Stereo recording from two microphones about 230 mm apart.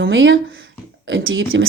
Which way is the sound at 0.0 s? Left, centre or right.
Right.